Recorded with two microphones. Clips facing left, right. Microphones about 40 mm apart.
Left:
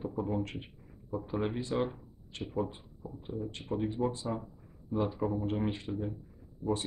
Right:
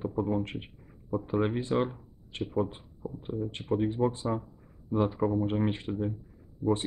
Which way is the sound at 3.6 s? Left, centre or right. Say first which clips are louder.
Right 5 dB; centre.